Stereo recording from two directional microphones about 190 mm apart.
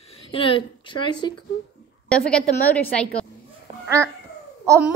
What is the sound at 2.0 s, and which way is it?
A woman's voice, 5° left (ahead or behind).